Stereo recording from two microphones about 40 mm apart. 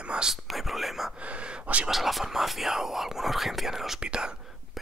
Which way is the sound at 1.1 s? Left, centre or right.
Right.